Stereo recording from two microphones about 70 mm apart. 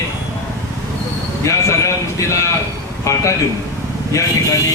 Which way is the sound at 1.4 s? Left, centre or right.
Left.